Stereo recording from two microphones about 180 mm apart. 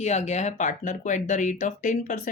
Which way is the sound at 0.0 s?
40° left (ahead or behind).